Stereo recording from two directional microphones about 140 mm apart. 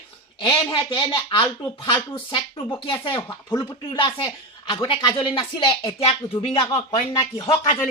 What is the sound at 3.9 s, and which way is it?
Speech, 35° left (ahead or behind).